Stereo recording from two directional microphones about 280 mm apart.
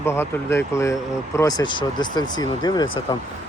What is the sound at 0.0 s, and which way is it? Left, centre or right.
Speech, centre.